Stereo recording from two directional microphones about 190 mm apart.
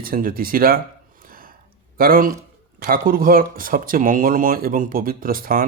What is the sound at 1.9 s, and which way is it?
Speech, 50° right (ahead or behind).